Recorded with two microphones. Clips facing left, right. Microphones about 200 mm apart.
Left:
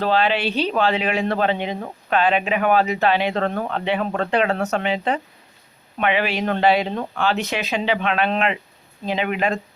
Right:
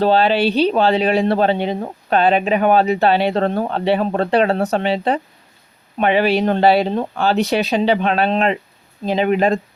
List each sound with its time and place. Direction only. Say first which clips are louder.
0.0 s speech: right 5 dB; 35° right (ahead or behind)